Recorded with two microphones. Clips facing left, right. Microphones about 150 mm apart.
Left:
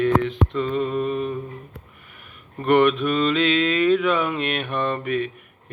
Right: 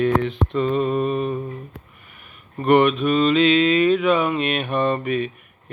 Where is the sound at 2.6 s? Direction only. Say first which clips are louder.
Right 1 dB; 10° right (ahead or behind).